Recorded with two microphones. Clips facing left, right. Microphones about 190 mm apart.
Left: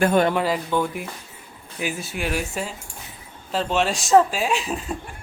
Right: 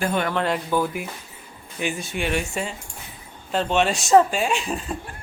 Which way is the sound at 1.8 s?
5° left (ahead or behind).